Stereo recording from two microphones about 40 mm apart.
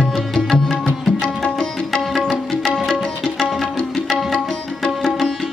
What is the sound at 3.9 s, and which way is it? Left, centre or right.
Music, centre.